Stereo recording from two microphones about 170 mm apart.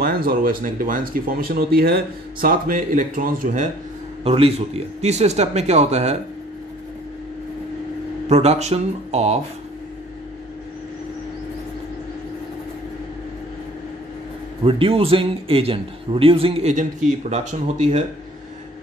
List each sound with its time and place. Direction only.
0.0 s speech: 60° right (ahead or behind)
4.2 s a man's voice: 35° right (ahead or behind)
8.3 s a man's voice: 40° right (ahead or behind)
14.6 s a man's voice: 30° right (ahead or behind)